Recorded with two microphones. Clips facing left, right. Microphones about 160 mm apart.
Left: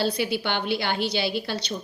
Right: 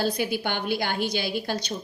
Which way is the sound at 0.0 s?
50° right (ahead or behind).